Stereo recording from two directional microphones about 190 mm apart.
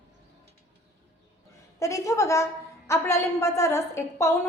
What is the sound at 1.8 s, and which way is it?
A woman's voice, 15° left (ahead or behind).